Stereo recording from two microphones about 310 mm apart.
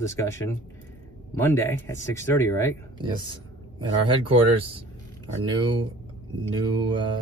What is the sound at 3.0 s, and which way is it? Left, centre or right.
Speech, centre.